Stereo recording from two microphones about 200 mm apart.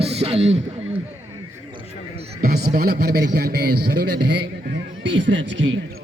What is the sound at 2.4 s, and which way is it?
A man's voice, 50° right (ahead or behind).